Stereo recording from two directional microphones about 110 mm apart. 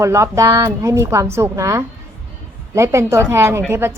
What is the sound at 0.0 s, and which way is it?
Speech, 25° right (ahead or behind).